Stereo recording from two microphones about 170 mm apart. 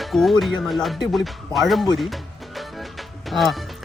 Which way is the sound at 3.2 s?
Centre (ahead or behind).